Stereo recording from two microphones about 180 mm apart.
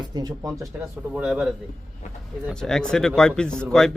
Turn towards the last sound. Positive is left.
turn(degrees=5)  # may be behind; listen again after turning